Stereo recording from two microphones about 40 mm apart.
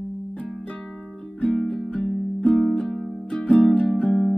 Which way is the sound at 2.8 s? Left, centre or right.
Centre.